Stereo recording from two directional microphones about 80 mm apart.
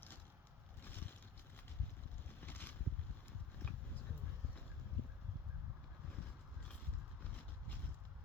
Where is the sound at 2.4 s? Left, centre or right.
Left.